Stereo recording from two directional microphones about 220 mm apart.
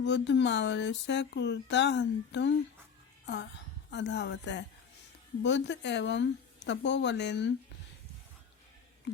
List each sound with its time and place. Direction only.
0.0 s speech: 50° left (ahead or behind)
3.9 s speech: 55° left (ahead or behind)